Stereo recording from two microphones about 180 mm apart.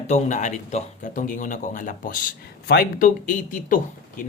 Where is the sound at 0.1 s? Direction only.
40° left (ahead or behind).